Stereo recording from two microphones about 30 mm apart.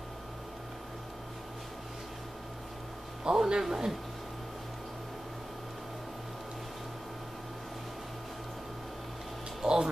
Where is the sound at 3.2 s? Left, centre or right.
Right.